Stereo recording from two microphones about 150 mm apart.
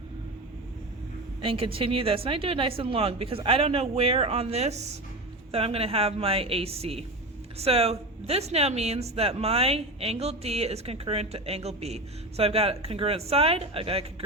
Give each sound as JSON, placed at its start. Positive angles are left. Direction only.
{"t": 1.4, "sound": "a woman's voice", "side_deg": -35}